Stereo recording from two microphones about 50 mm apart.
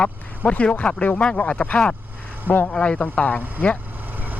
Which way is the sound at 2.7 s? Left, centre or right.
Left.